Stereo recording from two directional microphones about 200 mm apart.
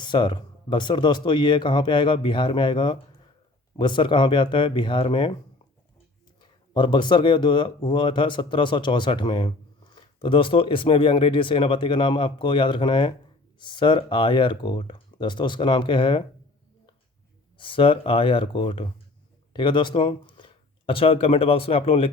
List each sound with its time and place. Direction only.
0.0 s speech: 25° left (ahead or behind)
6.4 s speech: 25° left (ahead or behind)
17.6 s speech: 25° left (ahead or behind)